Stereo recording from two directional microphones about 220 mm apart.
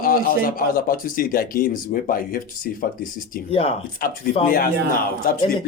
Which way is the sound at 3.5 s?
25° left (ahead or behind).